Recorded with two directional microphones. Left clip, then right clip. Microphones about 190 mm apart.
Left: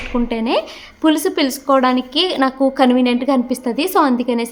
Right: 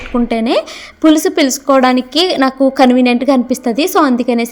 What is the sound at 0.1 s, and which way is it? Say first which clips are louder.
A woman's voice: right 5 dB; 25° right (ahead or behind).